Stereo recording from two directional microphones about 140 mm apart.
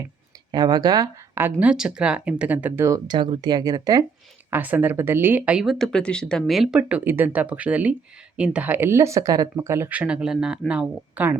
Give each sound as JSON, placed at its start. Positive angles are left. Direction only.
{"t": 0.5, "sound": "speech", "side_deg": -30}
{"t": 1.4, "sound": "speech", "side_deg": -15}
{"t": 4.5, "sound": "speech", "side_deg": -15}